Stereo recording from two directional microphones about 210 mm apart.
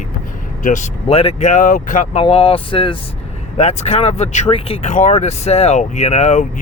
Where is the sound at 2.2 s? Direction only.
25° left (ahead or behind).